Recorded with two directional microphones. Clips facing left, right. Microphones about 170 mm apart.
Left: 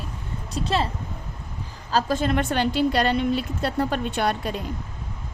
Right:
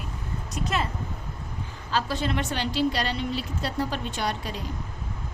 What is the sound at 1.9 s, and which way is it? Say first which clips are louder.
A woman's voice: left 5 dB; 45° left (ahead or behind).